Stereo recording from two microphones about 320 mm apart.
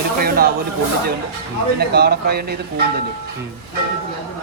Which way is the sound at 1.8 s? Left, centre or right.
Right.